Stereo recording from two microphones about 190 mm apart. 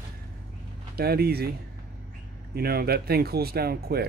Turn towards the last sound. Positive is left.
turn(degrees=-55)  # may be behind; listen again after turning